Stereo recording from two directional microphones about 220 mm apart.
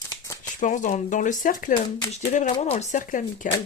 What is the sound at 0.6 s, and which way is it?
Speech, 35° left (ahead or behind).